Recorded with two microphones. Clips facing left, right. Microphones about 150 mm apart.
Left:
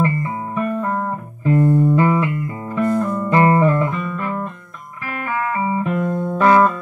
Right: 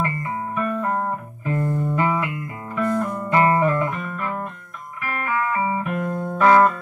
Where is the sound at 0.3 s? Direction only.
25° left (ahead or behind).